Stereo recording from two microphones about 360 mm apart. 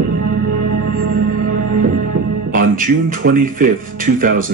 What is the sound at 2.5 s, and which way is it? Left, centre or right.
Speech, right.